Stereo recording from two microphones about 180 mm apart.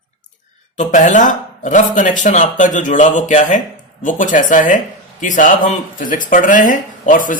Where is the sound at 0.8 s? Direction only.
45° left (ahead or behind).